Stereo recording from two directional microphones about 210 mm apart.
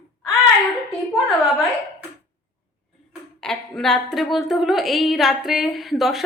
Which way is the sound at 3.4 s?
5° left (ahead or behind).